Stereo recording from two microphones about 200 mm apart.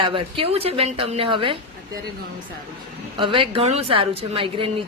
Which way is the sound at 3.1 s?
25° right (ahead or behind).